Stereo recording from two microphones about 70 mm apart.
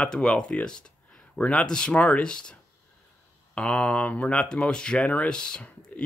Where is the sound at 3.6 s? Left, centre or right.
Centre.